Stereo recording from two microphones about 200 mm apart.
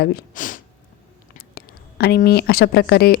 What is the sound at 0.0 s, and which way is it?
Speech, 40° left (ahead or behind).